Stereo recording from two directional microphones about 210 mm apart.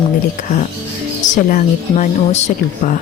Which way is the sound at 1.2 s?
35° left (ahead or behind).